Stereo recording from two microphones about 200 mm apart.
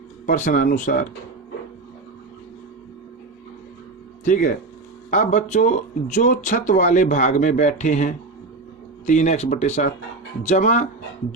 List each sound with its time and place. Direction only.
0.3 s speech: 40° left (ahead or behind)
4.2 s speech: 40° left (ahead or behind)